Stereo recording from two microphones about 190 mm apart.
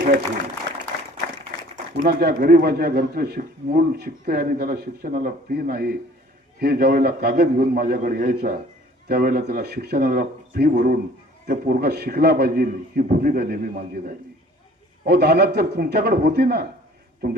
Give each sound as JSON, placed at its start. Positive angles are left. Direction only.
{"t": 2.0, "sound": "a man's voice", "side_deg": -55}